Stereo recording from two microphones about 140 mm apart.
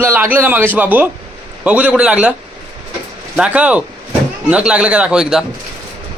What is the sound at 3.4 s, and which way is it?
A man's voice, 10° right (ahead or behind).